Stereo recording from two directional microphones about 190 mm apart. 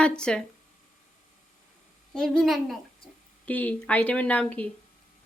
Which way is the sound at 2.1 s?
5° left (ahead or behind).